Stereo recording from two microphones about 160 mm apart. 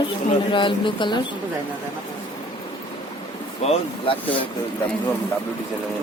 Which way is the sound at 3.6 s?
40° left (ahead or behind).